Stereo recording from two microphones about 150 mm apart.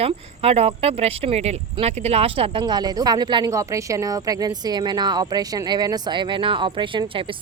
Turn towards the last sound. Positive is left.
turn(degrees=-35)  # may be behind; listen again after turning